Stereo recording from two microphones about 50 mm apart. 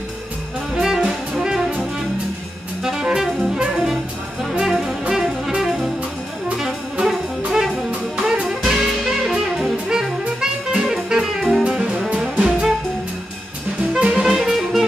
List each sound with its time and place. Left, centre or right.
0.8 s music: centre
2.8 s saxophone: centre
3.5 s brass instrument: centre
4.4 s music: centre
5.0 s saxophone: centre
6.6 s jazz: centre
7.9 s music: centre
13.9 s music: centre
14.2 s music: centre